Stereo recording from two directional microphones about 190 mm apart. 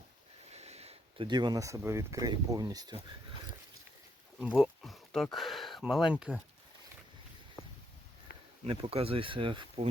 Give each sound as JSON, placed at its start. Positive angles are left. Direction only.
{"t": 0.5, "sound": "speech", "side_deg": -35}
{"t": 4.4, "sound": "speech", "side_deg": -5}
{"t": 8.6, "sound": "speech", "side_deg": -30}